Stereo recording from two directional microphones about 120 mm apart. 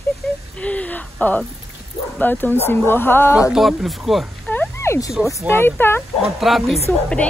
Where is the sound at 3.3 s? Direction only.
5° right (ahead or behind).